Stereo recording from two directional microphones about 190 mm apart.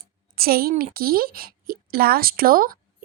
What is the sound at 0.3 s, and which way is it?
Speech, 50° right (ahead or behind).